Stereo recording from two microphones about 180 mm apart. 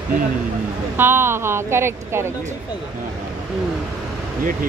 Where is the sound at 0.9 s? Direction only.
10° right (ahead or behind).